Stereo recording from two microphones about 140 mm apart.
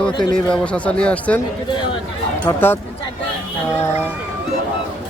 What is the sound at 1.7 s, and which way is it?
Speech, 35° left (ahead or behind).